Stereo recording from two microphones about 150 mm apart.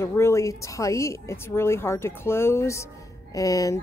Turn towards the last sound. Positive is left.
turn(degrees=20)  # may be behind; listen again after turning